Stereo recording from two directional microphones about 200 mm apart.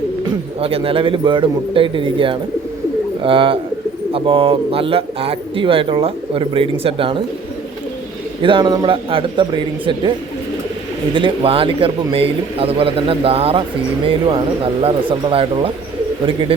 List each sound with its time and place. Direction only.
0.6 s speech: 30° right (ahead or behind)
8.4 s speech: 25° right (ahead or behind)